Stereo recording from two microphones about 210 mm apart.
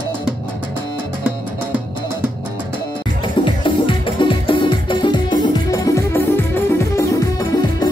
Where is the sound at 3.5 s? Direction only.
25° left (ahead or behind).